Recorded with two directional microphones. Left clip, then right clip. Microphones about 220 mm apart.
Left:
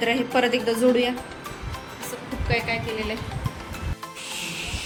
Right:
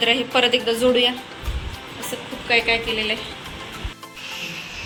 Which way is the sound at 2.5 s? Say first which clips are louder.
Right 7 dB; 10° left (ahead or behind).